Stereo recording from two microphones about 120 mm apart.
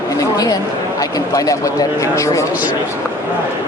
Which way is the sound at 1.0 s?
30° left (ahead or behind).